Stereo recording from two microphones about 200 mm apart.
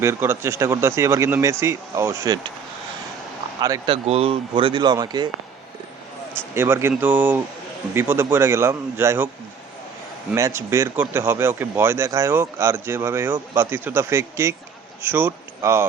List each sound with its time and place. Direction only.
0.0 s a man's voice: 10° right (ahead or behind)
3.6 s speech: 20° right (ahead or behind)
6.5 s a man's voice: 10° right (ahead or behind)
10.3 s a man's voice: 15° right (ahead or behind)